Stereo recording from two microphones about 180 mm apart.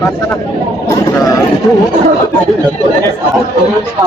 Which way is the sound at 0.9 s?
20° left (ahead or behind).